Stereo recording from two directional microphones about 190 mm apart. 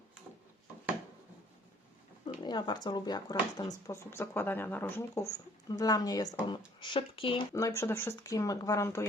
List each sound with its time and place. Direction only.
2.4 s speech: 25° left (ahead or behind)
7.5 s speech: 15° left (ahead or behind)